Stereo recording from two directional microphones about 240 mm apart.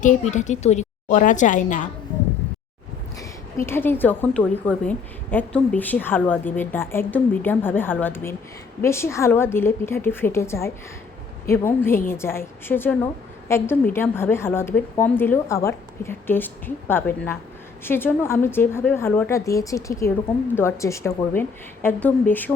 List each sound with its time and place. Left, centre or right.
0.0 s a woman's voice: left
3.6 s a woman's voice: centre